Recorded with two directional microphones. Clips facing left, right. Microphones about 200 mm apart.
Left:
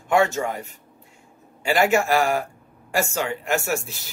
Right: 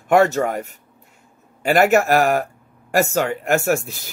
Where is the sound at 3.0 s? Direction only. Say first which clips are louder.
Right 6 dB; 55° right (ahead or behind).